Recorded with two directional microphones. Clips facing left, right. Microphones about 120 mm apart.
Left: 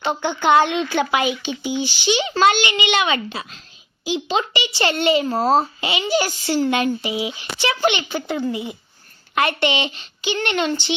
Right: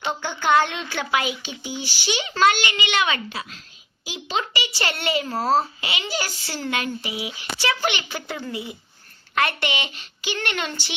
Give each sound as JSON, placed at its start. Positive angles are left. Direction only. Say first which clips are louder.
{"t": 0.0, "sound": "a child's voice", "louder": "left 5 dB", "side_deg": 20}